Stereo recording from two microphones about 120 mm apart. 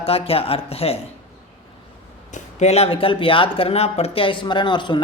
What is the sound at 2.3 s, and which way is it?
Speech, 65° left (ahead or behind).